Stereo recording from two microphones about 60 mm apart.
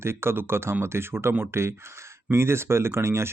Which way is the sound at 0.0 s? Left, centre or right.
Right.